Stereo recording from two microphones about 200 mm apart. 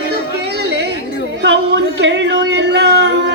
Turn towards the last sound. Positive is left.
turn(degrees=-60)  # may be behind; listen again after turning